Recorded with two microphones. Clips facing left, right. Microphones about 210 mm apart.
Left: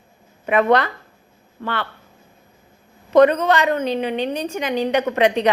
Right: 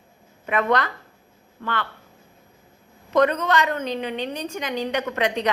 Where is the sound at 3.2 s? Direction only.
20° left (ahead or behind).